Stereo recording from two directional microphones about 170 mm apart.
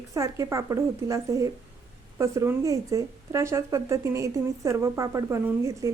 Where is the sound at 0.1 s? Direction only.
20° right (ahead or behind).